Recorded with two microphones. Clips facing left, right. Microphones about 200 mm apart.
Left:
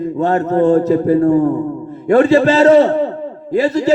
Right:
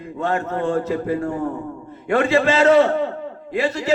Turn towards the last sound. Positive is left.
turn(degrees=40)  # may be behind; listen again after turning